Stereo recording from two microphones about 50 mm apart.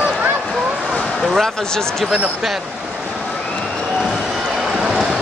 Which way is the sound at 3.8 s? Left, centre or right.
Centre.